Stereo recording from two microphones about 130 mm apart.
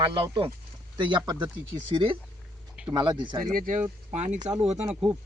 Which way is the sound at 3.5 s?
90° right.